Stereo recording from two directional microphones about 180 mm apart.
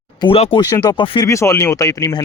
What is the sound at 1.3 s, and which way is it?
Speech, 15° left (ahead or behind).